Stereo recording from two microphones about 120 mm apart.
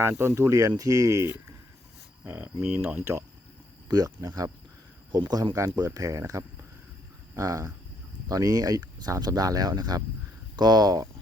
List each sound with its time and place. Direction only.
0.0 s speech: 20° right (ahead or behind)
2.2 s speech: 15° right (ahead or behind)
2.6 s speech: 5° right (ahead or behind)
2.8 s speech: 15° right (ahead or behind)
3.8 s speech: 30° right (ahead or behind)